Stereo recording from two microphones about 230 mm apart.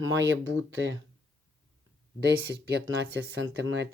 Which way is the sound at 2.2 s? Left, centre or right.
Right.